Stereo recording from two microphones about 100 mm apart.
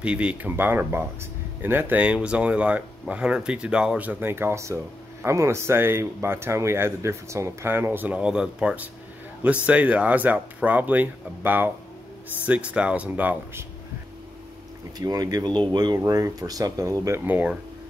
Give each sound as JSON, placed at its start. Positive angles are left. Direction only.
{"t": 0.0, "sound": "speech", "side_deg": -10}
{"t": 15.0, "sound": "speech", "side_deg": -40}
{"t": 17.2, "sound": "speech", "side_deg": -15}